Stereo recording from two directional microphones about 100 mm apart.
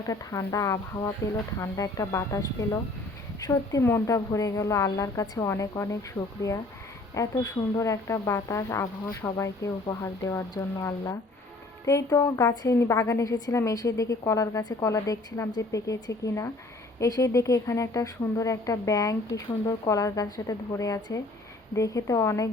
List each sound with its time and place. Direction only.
0.0 s a woman's voice: 35° left (ahead or behind)